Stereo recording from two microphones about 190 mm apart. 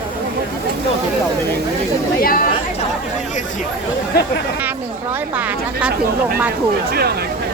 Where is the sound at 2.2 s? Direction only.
50° left (ahead or behind).